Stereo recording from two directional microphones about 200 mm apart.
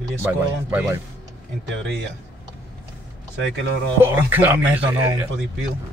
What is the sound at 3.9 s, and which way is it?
Speech, 10° right (ahead or behind).